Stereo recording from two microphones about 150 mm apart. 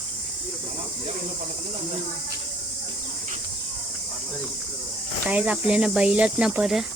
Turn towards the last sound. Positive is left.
turn(degrees=-5)  # may be behind; listen again after turning